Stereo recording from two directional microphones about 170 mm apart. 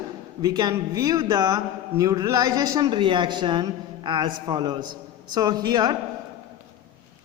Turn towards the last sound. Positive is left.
turn(degrees=-25)  # may be behind; listen again after turning